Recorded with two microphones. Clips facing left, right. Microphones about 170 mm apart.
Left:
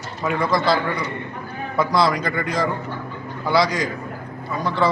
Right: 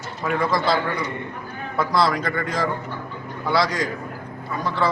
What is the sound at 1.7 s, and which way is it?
Speech, centre (ahead or behind).